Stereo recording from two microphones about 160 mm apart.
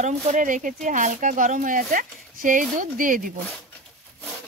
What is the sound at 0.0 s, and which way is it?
Speech, 50° right (ahead or behind).